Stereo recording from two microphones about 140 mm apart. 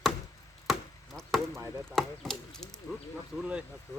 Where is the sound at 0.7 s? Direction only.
Centre (ahead or behind).